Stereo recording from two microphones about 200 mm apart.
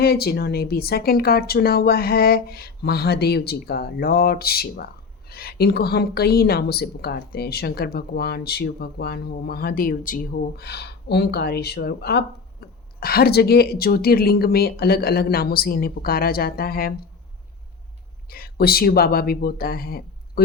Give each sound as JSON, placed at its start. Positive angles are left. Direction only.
{"t": 0.0, "sound": "a woman's voice", "side_deg": 50}
{"t": 18.3, "sound": "a woman's voice", "side_deg": 50}